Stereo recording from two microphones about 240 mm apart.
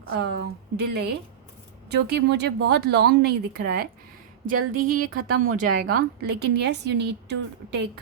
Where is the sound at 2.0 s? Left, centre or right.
Right.